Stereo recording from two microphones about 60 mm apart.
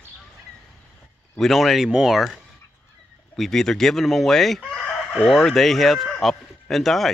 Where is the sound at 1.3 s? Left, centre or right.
Centre.